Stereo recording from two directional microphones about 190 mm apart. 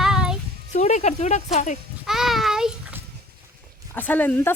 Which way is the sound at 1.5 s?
40° left (ahead or behind).